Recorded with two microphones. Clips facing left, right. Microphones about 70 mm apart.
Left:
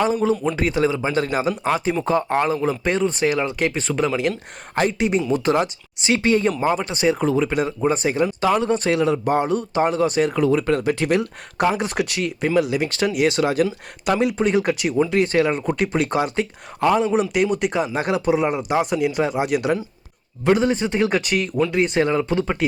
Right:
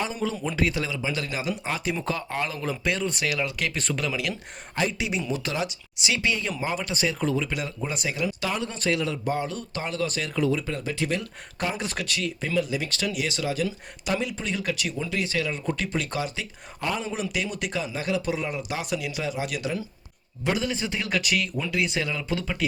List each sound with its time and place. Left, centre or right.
0.1 s speech: left
3.8 s speech: centre
4.0 s speech: left
4.7 s speech: left
8.9 s speech: left
9.3 s speech: left
10.5 s speech: left
11.8 s speech: left
13.1 s speech: left